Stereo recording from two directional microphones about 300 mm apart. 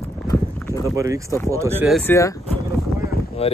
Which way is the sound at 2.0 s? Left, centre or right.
Centre.